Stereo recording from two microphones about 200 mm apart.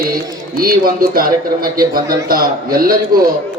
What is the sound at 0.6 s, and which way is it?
A man's voice, 45° right (ahead or behind).